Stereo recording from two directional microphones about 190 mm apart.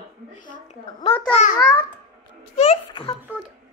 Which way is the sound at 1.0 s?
35° left (ahead or behind).